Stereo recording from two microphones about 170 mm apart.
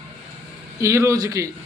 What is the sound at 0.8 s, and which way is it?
Speech, 15° right (ahead or behind).